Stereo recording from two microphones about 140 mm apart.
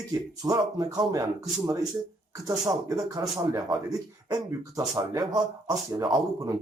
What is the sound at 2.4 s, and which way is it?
Speech, 25° right (ahead or behind).